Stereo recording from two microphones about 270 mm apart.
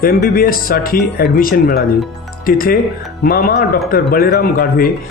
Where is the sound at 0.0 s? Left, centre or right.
Left.